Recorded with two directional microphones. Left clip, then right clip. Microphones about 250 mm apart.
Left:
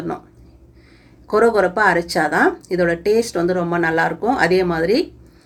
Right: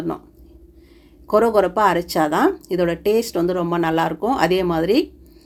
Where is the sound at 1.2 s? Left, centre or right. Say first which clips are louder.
Left 1 dB; right.